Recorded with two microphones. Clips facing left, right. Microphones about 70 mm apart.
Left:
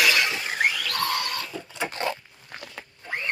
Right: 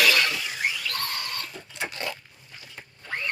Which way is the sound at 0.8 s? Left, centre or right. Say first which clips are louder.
Left 5 dB; left.